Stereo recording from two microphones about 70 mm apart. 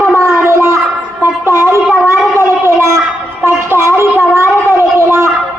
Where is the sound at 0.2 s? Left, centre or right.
Right.